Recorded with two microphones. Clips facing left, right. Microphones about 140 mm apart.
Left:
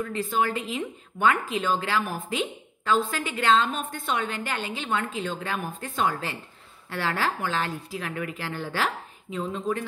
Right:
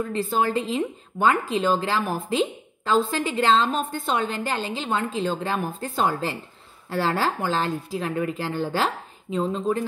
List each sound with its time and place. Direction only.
0.0 s a woman's voice: 35° right (ahead or behind)